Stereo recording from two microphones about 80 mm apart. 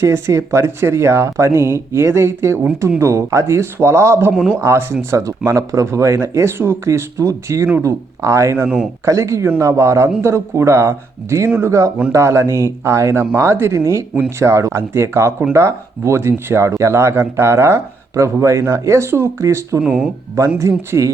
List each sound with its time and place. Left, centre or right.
0.0 s speech: right
8.5 s speech: right
9.0 s speech: right
19.8 s speech: centre
20.6 s speech: right